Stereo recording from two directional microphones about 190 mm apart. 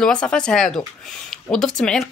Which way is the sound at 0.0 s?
5° left (ahead or behind).